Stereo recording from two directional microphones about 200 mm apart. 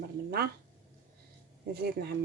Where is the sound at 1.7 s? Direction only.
55° right (ahead or behind).